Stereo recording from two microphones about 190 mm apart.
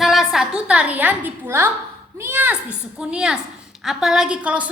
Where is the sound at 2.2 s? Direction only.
10° right (ahead or behind).